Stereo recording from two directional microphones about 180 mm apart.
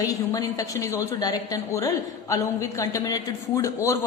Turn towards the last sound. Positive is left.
turn(degrees=15)  # may be behind; listen again after turning